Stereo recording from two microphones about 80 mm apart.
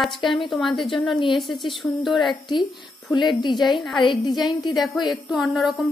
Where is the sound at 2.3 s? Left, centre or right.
Left.